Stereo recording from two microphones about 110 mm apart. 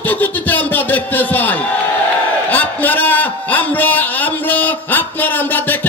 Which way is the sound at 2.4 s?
15° left (ahead or behind).